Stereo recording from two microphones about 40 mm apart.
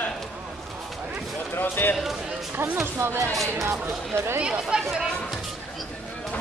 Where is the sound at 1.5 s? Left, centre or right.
Left.